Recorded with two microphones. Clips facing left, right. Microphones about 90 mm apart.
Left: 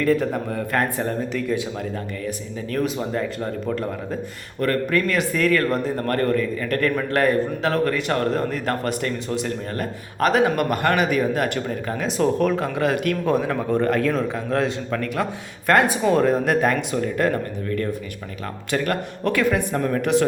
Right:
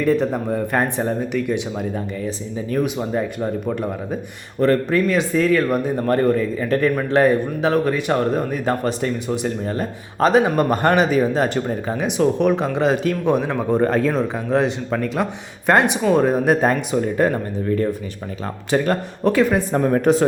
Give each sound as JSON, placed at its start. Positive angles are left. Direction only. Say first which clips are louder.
{"t": 0.2, "sound": "a man's voice", "louder": "right 4 dB", "side_deg": -20}
{"t": 2.7, "sound": "a man's voice", "louder": "right 2 dB", "side_deg": -10}
{"t": 13.7, "sound": "a man's voice", "louder": "right 4 dB", "side_deg": -30}
{"t": 19.9, "sound": "speech", "louder": "right 3 dB", "side_deg": -35}